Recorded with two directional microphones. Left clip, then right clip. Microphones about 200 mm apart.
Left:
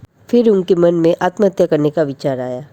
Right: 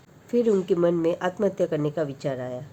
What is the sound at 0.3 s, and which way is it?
Speech, 40° left (ahead or behind).